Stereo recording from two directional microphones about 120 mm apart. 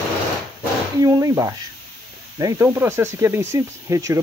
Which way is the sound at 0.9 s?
30° right (ahead or behind).